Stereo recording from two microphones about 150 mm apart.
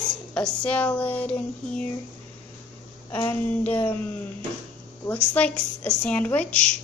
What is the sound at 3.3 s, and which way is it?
Speech, 15° left (ahead or behind).